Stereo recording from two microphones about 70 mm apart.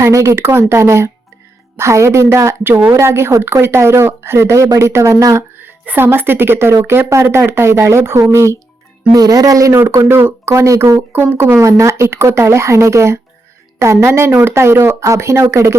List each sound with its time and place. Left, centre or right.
0.0 s speech: right
5.5 s speech: right
9.1 s speech: right
9.9 s speech: right
11.1 s speech: right
11.5 s speech: right
14.3 s speech: right
14.5 s speech: right